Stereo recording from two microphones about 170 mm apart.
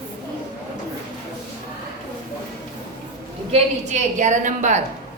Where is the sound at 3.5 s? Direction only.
45° right (ahead or behind).